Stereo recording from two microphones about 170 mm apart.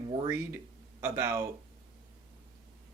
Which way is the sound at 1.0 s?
15° right (ahead or behind).